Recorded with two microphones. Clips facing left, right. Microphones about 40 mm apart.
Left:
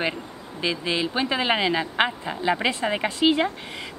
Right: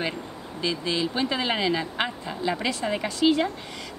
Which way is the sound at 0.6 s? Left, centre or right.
Left.